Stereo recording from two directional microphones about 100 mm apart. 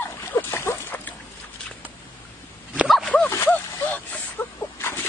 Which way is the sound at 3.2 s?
25° left (ahead or behind).